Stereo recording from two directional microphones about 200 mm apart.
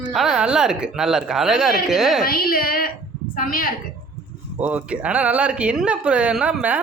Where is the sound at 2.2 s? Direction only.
45° left (ahead or behind).